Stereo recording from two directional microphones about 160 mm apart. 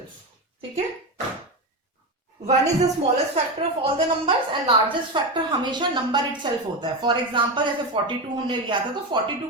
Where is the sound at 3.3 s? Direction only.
40° right (ahead or behind).